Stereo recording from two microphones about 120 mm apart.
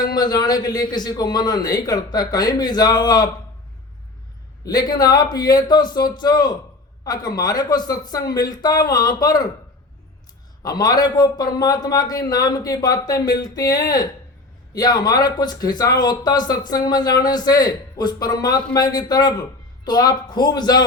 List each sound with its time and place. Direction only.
0.0 s speech: 35° left (ahead or behind)
4.6 s speech: 35° left (ahead or behind)
10.6 s speech: 35° left (ahead or behind)